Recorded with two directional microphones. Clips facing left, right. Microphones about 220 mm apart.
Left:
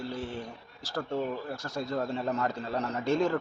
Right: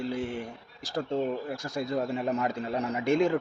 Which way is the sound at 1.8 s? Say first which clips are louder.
Right 2 dB; 15° right (ahead or behind).